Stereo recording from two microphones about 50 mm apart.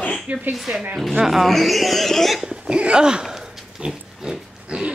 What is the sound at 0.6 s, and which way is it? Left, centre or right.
A woman's voice, centre.